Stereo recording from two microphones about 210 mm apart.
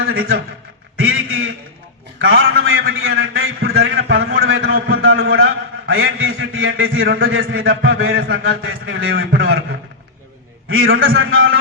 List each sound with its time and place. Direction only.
0.0 s a man's voice: 70° right (ahead or behind)
0.9 s a sound: 70° right (ahead or behind)
2.2 s a man's voice: 70° right (ahead or behind)
4.4 s a sound: 70° right (ahead or behind)
5.9 s a man's voice: 70° right (ahead or behind)
10.7 s a man's voice: 70° right (ahead or behind)